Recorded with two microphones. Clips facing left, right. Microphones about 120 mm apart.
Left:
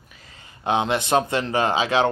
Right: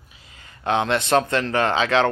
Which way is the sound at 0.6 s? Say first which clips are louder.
Right 1 dB; 15° left (ahead or behind).